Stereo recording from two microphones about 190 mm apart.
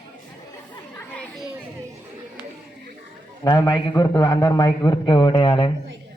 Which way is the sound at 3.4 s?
20° left (ahead or behind).